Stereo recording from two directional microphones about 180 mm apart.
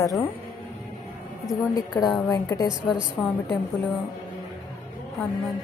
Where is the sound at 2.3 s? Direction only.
20° left (ahead or behind).